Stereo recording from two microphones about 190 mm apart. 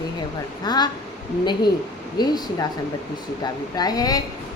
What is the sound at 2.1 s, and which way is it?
A woman's voice, 20° left (ahead or behind).